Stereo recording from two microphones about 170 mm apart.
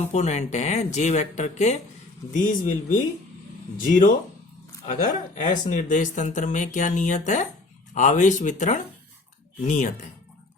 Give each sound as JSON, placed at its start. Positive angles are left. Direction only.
{"t": 0.1, "sound": "speech", "side_deg": 40}